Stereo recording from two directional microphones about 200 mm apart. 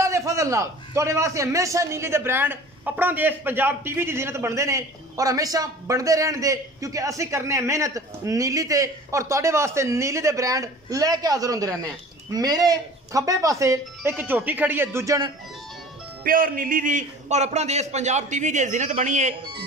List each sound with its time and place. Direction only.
0.0 s a man's voice: 15° right (ahead or behind)
16.3 s a man's voice: 45° right (ahead or behind)